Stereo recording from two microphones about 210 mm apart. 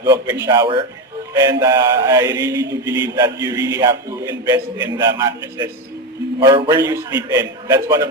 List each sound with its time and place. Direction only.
0.0 s mantra: 15° right (ahead or behind)